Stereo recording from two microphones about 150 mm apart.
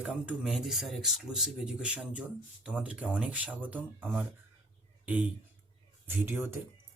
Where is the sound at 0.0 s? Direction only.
5° right (ahead or behind).